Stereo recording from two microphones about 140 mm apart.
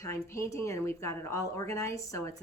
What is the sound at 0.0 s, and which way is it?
A woman's voice, 20° left (ahead or behind).